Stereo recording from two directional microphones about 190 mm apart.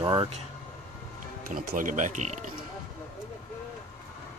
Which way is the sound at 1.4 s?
45° right (ahead or behind).